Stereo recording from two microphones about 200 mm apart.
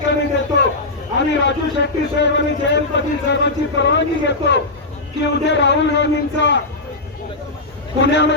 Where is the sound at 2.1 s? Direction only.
60° left (ahead or behind).